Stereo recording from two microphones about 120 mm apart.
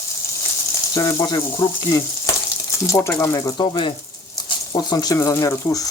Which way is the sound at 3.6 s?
40° left (ahead or behind).